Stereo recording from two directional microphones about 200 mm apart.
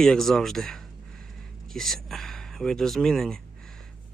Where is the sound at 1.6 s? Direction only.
Centre (ahead or behind).